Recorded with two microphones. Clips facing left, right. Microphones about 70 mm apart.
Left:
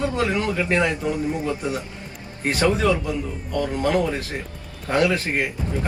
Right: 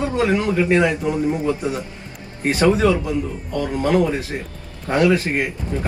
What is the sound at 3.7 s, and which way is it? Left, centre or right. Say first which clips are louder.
Speech: right 5 dB; centre.